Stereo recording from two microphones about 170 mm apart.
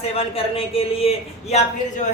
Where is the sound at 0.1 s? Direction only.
35° left (ahead or behind).